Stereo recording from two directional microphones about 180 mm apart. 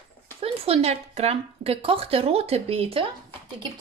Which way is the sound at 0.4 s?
35° right (ahead or behind).